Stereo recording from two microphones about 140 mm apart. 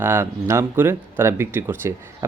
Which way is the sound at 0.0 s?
15° right (ahead or behind).